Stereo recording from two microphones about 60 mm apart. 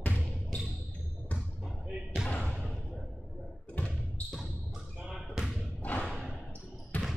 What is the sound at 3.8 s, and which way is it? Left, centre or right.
Basketball bounce, left.